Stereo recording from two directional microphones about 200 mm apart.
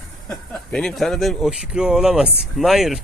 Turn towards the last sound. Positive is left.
turn(degrees=0)  # may be behind; listen again after turning